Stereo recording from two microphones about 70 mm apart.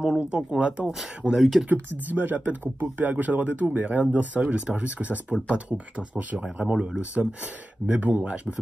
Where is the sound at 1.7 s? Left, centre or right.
Right.